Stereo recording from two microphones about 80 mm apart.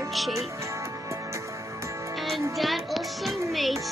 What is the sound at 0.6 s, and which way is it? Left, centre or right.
Music, right.